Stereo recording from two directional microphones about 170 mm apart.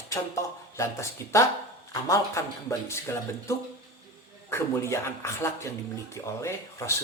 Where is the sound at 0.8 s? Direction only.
15° left (ahead or behind).